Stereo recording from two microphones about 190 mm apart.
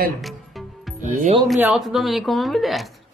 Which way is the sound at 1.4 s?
Centre (ahead or behind).